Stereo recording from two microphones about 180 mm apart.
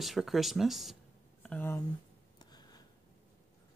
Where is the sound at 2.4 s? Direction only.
25° left (ahead or behind).